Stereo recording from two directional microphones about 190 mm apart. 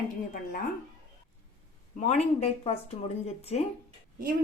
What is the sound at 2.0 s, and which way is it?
Speech, 35° left (ahead or behind).